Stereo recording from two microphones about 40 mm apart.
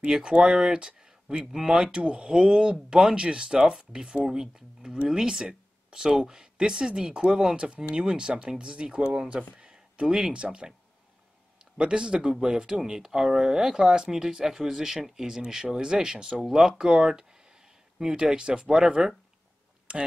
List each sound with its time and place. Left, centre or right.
0.0 s speech: right
11.8 s speech: right
19.9 s speech: right